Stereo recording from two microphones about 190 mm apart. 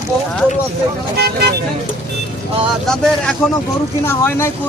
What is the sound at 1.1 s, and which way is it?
Speech, 55° right (ahead or behind).